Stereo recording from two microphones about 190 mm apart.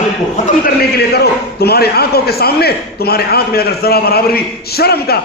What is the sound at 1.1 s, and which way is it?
A man's voice, 55° left (ahead or behind).